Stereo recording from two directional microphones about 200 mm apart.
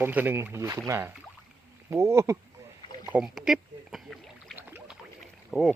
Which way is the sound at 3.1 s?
5° right (ahead or behind).